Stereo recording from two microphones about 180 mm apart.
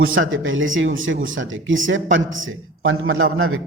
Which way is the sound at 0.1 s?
90° right.